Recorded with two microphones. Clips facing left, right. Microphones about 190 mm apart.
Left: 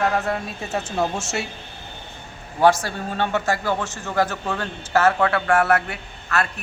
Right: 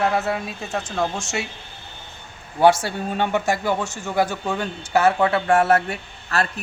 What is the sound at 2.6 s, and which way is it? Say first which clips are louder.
A man's voice: right 1 dB; 15° right (ahead or behind).